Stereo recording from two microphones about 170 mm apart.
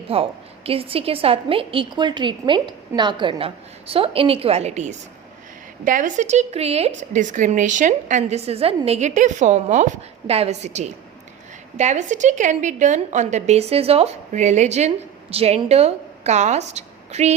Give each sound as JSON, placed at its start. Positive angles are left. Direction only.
{"t": 0.1, "sound": "a woman's voice", "side_deg": -35}